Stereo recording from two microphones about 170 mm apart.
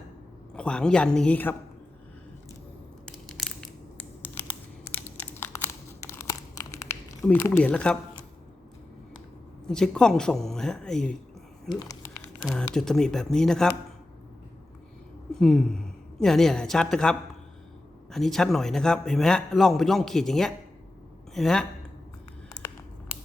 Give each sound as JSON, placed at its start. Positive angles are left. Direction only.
{"t": 0.5, "sound": "a man's voice", "side_deg": 5}
{"t": 3.1, "sound": "crushing", "side_deg": 5}
{"t": 4.2, "sound": "crumpling", "side_deg": 10}
{"t": 7.2, "sound": "speech", "side_deg": 10}
{"t": 9.6, "sound": "a man's voice", "side_deg": 5}
{"t": 11.7, "sound": "speech", "side_deg": 20}
{"t": 12.5, "sound": "a man's voice", "side_deg": 5}
{"t": 15.3, "sound": "a man's voice", "side_deg": 5}